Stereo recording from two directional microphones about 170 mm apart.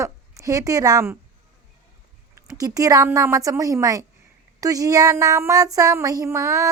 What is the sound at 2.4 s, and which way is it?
Speech, 20° right (ahead or behind).